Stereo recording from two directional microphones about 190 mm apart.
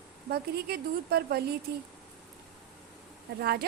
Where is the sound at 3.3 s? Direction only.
55° right (ahead or behind).